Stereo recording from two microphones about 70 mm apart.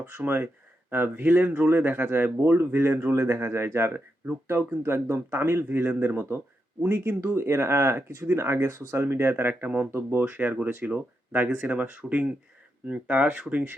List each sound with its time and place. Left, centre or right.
0.0 s speech: right
7.2 s speech: right